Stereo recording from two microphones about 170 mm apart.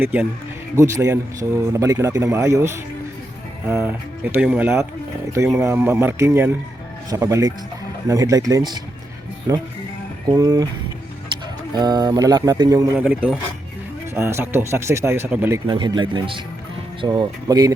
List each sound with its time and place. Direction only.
0.0 s a man's voice: 10° right (ahead or behind)
11.7 s speech: 25° right (ahead or behind)
13.1 s a man's voice: 5° right (ahead or behind)
15.6 s speech: 25° right (ahead or behind)